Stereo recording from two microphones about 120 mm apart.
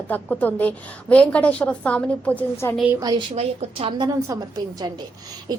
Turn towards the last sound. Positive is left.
turn(degrees=-35)  # may be behind; listen again after turning